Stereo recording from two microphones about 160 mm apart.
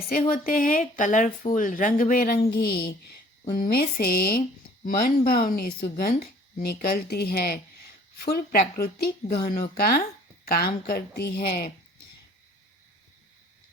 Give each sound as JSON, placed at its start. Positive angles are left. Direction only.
{"t": 0.3, "sound": "speech", "side_deg": 60}
{"t": 3.5, "sound": "speech", "side_deg": 60}